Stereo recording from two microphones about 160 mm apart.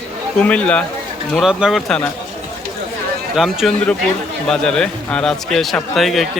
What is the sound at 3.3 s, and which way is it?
A man's voice, centre (ahead or behind).